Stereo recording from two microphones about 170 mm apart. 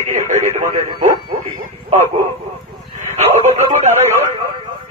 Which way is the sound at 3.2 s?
40° right (ahead or behind).